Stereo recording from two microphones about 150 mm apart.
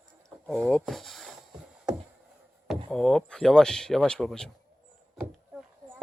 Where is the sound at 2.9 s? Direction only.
5° left (ahead or behind).